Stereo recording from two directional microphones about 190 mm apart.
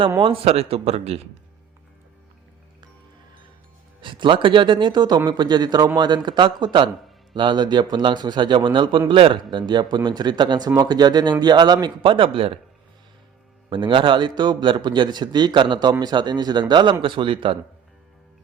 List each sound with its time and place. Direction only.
0.2 s speech: 30° right (ahead or behind)
4.0 s a man's voice: 25° right (ahead or behind)
13.7 s a man's voice: 25° right (ahead or behind)